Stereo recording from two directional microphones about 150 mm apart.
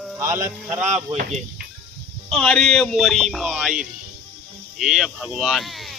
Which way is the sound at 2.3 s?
5° left (ahead or behind).